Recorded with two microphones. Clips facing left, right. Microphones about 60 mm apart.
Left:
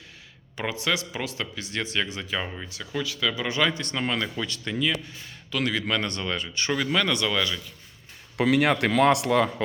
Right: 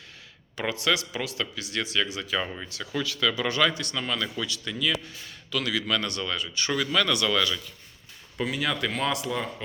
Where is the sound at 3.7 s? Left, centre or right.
Left.